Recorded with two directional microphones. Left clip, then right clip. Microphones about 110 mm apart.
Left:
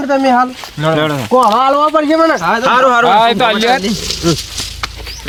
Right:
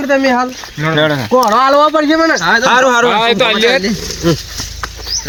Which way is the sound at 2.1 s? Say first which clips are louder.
Left 1 dB; 10° right (ahead or behind).